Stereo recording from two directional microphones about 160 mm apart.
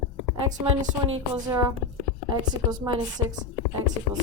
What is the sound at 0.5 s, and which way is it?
Speech, 50° right (ahead or behind).